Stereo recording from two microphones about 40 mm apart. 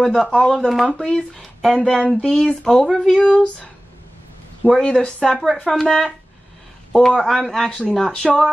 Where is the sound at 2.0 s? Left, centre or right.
Left.